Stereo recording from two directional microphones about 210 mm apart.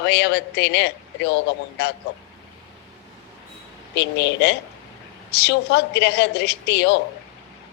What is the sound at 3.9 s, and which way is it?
A woman's voice, 55° left (ahead or behind).